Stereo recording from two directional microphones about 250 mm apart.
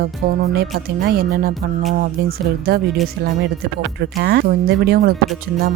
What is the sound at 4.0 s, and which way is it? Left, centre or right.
Speech, right.